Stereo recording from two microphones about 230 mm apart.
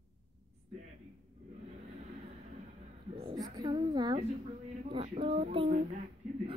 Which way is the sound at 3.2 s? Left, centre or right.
Right.